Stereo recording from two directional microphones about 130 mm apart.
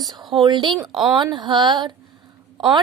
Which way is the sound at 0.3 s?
35° right (ahead or behind).